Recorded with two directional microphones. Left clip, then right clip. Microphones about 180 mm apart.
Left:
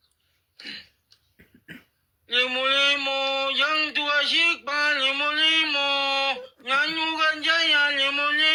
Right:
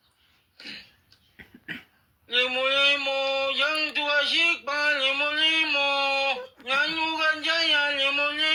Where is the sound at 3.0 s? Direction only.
60° left (ahead or behind).